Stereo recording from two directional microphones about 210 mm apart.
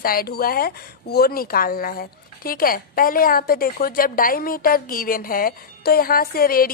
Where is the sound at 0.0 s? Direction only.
45° left (ahead or behind).